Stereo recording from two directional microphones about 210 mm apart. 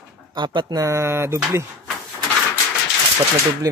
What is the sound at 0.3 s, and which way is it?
Speech, 20° right (ahead or behind).